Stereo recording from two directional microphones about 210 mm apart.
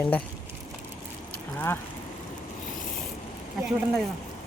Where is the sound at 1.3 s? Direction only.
10° left (ahead or behind).